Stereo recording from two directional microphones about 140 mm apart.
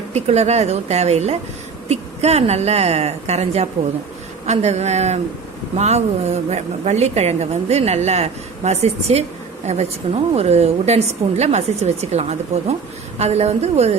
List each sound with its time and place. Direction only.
0.1 s a woman's voice: 50° right (ahead or behind)